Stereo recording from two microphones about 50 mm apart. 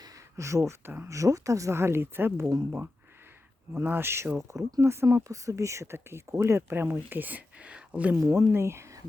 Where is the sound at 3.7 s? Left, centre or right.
Right.